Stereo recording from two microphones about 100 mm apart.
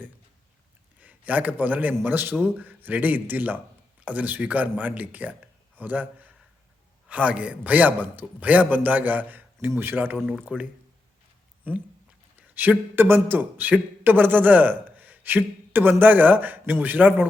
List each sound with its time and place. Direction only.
1.0 s a man's voice: 15° right (ahead or behind)
12.4 s a man's voice: 20° right (ahead or behind)